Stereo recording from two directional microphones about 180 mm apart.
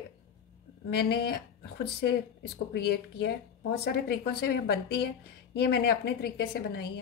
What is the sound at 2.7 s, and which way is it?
Speech, 65° left (ahead or behind).